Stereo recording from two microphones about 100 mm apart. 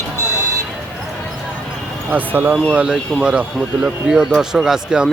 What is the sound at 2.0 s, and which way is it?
Speech, 20° right (ahead or behind).